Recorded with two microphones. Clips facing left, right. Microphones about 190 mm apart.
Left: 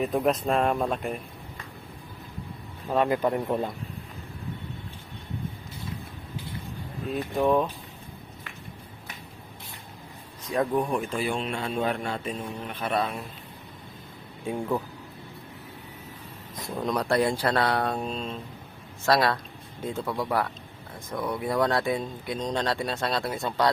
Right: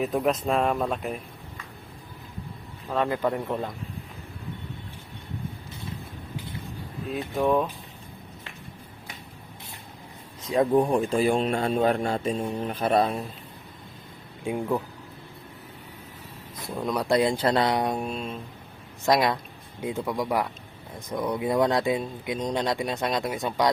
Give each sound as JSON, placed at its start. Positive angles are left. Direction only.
{"t": 0.0, "sound": "speech", "side_deg": 0}
{"t": 2.9, "sound": "speech", "side_deg": 15}
{"t": 7.3, "sound": "speech", "side_deg": 0}
{"t": 10.5, "sound": "speech", "side_deg": -30}
{"t": 14.4, "sound": "speech", "side_deg": -10}
{"t": 16.7, "sound": "speech", "side_deg": -5}
{"t": 17.1, "sound": "speech", "side_deg": -15}